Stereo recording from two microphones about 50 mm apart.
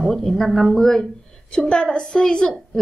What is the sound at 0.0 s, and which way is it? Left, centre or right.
Speech, centre.